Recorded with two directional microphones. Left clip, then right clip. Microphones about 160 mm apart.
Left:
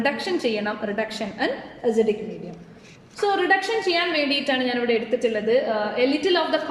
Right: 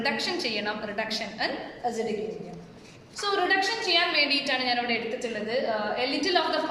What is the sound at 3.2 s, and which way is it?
A woman's voice, 60° left (ahead or behind).